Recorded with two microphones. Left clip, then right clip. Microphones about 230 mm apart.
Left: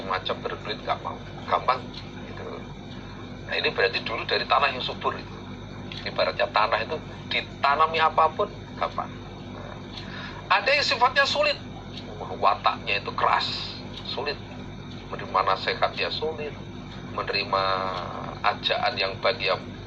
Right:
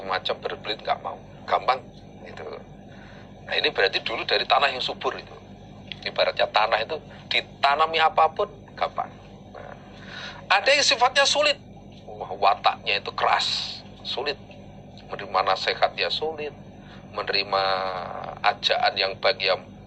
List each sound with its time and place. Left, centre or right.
0.0 s a man's voice: right
3.5 s a man's voice: right
10.5 s a man's voice: right
15.1 s a man's voice: right